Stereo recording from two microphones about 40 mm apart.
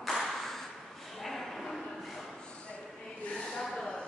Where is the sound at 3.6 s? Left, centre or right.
Centre.